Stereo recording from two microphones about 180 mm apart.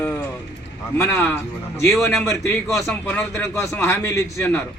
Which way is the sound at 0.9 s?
15° left (ahead or behind).